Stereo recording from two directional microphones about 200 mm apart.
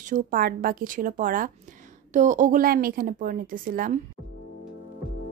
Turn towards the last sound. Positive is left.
turn(degrees=-45)  # may be behind; listen again after turning